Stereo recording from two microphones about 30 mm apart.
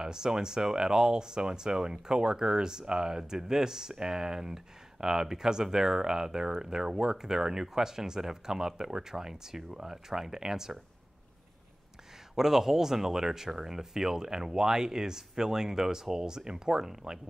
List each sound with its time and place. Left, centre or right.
0.0 s speech: right
12.4 s speech: centre